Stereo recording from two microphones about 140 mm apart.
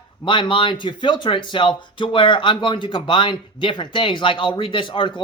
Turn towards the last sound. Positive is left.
turn(degrees=35)  # may be behind; listen again after turning